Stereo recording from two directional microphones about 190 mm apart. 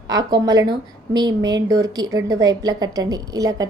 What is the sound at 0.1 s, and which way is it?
A woman's voice, 20° right (ahead or behind).